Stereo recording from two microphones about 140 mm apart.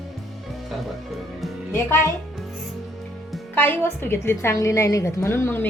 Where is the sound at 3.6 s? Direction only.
15° left (ahead or behind).